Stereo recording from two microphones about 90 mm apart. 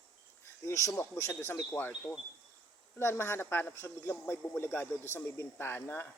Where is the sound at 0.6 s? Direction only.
35° left (ahead or behind).